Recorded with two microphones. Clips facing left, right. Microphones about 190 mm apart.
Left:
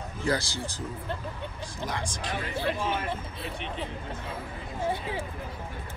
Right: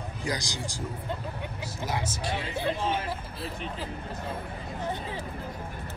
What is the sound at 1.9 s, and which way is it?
Speech, 5° right (ahead or behind).